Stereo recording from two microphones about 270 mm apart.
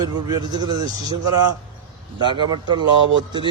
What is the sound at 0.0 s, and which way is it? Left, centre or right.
Speech, centre.